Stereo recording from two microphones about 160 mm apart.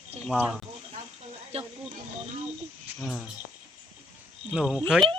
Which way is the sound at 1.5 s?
40° right (ahead or behind).